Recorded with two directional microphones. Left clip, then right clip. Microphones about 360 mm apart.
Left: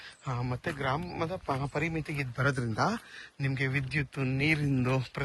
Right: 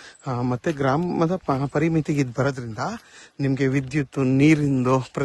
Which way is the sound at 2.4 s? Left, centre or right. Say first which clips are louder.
Right 4 dB; centre.